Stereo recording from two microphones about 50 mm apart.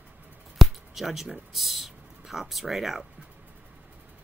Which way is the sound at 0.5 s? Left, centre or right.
Centre.